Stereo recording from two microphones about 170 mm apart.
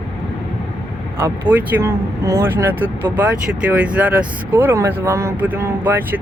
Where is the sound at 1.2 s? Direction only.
10° right (ahead or behind).